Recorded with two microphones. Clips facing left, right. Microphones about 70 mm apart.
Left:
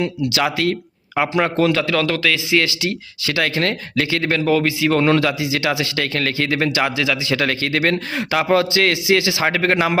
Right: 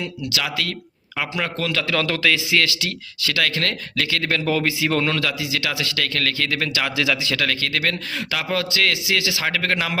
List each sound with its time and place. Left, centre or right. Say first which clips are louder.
0.3 s speech: left 7 dB; left
1.9 s speech: left 2 dB; centre
2.6 s speech: left 3 dB; centre
5.0 s speech: left 7 dB; left
6.9 s speech: left 1 dB; centre
7.3 s speech: left 4 dB; left